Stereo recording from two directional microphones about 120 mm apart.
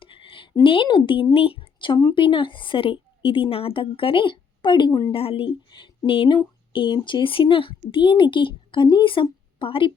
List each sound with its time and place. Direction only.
0.0 s a sound: 45° left (ahead or behind)
0.6 s speech: 45° left (ahead or behind)
4.9 s a woman's voice: 25° left (ahead or behind)
5.1 s speech: 50° left (ahead or behind)